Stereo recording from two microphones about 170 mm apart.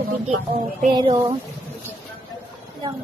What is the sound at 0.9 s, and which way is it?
Speech, 25° right (ahead or behind).